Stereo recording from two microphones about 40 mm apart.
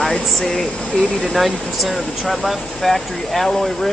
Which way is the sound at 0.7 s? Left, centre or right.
Left.